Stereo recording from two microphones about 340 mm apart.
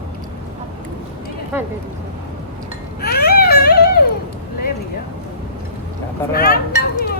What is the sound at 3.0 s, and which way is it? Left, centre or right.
Baby cry, left.